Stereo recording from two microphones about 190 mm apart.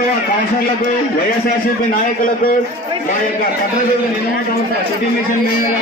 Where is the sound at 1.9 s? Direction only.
50° left (ahead or behind).